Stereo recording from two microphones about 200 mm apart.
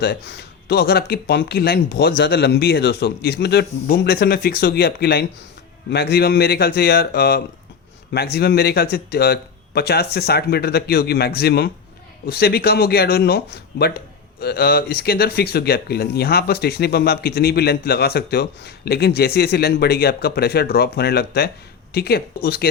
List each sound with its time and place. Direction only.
0.0 s speech: 55° left (ahead or behind)